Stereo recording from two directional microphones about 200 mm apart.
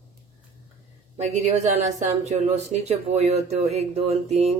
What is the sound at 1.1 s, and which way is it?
Speech, 35° right (ahead or behind).